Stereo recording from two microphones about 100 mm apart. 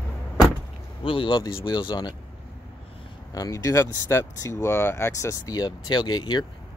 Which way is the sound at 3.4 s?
35° left (ahead or behind).